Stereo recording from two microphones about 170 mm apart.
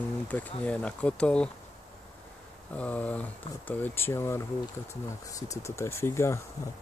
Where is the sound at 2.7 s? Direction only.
10° left (ahead or behind).